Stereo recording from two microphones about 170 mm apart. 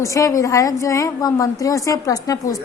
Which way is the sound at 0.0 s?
20° left (ahead or behind).